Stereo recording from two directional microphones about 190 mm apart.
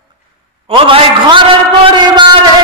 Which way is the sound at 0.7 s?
30° right (ahead or behind).